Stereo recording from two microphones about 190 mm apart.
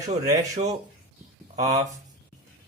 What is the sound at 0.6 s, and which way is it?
Speech, 30° right (ahead or behind).